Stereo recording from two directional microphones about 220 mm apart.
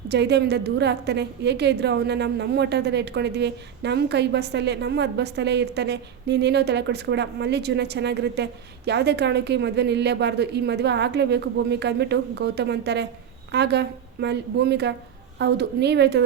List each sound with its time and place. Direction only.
0.1 s a woman's voice: 50° right (ahead or behind)